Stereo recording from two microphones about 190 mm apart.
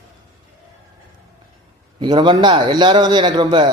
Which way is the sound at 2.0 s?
25° right (ahead or behind).